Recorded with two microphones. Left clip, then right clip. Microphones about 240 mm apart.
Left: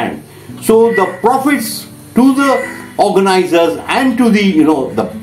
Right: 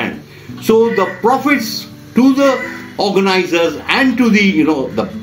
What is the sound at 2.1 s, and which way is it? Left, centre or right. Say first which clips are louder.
A man's voice: left 1 dB; centre.